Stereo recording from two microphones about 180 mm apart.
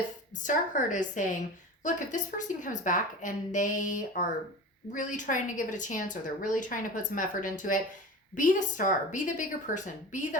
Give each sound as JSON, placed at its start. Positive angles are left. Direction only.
{"t": 0.4, "sound": "a woman's voice", "side_deg": 45}